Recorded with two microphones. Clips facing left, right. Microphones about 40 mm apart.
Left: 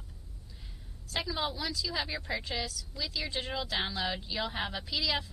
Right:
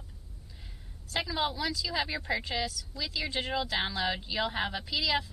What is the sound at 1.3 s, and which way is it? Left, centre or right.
A woman's voice, centre.